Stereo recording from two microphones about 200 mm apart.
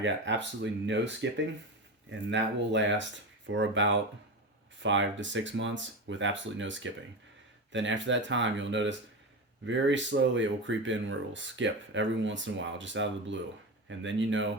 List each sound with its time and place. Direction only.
0.0 s speech: 65° right (ahead or behind)